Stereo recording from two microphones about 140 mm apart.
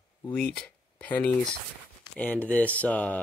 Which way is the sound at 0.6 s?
10° left (ahead or behind).